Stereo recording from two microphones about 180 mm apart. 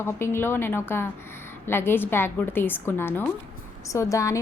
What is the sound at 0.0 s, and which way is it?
A woman's voice, 15° left (ahead or behind).